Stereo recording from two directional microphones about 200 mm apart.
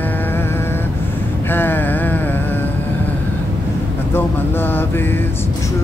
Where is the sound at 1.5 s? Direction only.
10° left (ahead or behind).